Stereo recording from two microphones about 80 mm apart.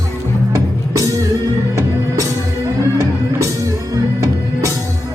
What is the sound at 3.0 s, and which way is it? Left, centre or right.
Music, right.